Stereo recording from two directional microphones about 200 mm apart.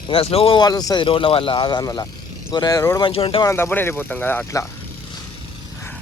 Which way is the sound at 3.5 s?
10° left (ahead or behind).